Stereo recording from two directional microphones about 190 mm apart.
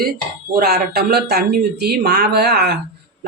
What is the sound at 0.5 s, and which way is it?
Speech, 55° right (ahead or behind).